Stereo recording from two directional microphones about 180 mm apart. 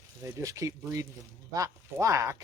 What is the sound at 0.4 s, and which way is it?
Speech, 20° right (ahead or behind).